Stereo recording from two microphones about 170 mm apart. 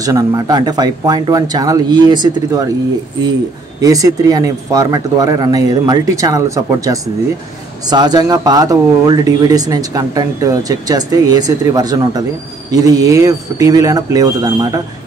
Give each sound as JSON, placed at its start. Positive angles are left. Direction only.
{"t": 0.0, "sound": "speech", "side_deg": -20}
{"t": 3.8, "sound": "speech", "side_deg": -20}